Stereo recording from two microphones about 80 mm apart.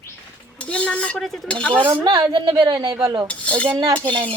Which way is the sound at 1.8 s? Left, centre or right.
Right.